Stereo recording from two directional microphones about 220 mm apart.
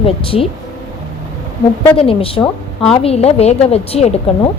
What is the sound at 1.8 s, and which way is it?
A woman's voice, 25° left (ahead or behind).